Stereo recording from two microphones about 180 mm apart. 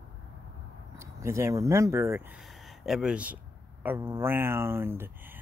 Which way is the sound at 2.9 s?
5° right (ahead or behind).